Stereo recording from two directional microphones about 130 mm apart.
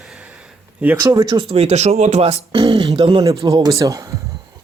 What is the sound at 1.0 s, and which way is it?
Speech, 30° right (ahead or behind).